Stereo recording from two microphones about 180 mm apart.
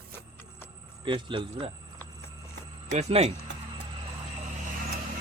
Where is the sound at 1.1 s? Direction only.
25° right (ahead or behind).